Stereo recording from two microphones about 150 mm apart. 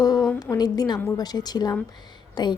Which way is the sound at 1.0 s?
25° left (ahead or behind).